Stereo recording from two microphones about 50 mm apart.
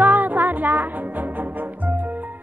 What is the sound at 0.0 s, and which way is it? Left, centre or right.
Music, right.